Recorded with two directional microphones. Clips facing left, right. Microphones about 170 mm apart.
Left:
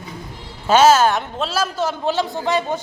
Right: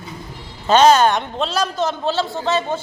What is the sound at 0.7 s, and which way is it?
A man's voice, 5° left (ahead or behind).